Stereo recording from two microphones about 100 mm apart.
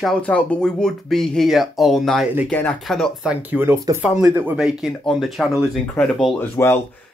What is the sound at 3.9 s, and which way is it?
Speech, 35° right (ahead or behind).